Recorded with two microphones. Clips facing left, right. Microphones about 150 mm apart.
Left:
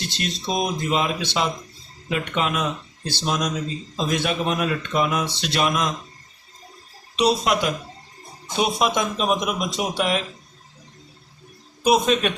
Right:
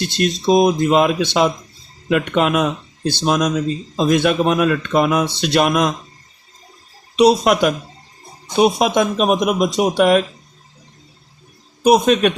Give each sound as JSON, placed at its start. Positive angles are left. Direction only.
{"t": 0.2, "sound": "speech", "side_deg": -45}
{"t": 7.3, "sound": "speech", "side_deg": -60}
{"t": 8.5, "sound": "speech", "side_deg": -45}
{"t": 11.8, "sound": "speech", "side_deg": -50}